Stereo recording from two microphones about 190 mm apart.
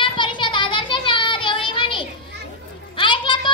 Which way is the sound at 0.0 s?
25° left (ahead or behind).